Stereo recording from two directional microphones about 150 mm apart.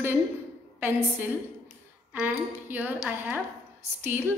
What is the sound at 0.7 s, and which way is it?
A woman's voice, 15° right (ahead or behind).